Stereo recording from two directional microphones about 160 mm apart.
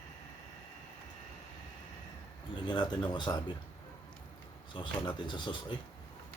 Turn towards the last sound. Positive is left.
turn(degrees=30)  # may be behind; listen again after turning